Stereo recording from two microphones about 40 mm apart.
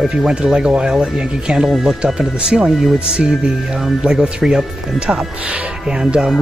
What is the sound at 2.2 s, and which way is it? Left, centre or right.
Speech, centre.